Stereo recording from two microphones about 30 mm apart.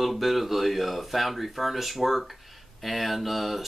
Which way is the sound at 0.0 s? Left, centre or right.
Centre.